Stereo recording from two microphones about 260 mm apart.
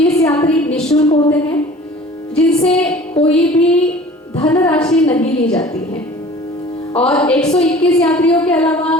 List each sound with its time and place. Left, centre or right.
0.0 s a sound: centre
0.5 s a woman's voice: centre
2.4 s a woman's voice: centre
7.0 s a woman's voice: centre